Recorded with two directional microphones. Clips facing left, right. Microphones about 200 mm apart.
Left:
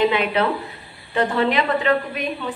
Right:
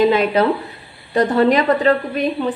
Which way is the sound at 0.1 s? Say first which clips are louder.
Right 5 dB; 40° right (ahead or behind).